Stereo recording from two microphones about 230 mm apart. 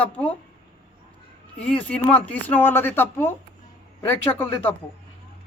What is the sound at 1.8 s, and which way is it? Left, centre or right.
Speech, centre.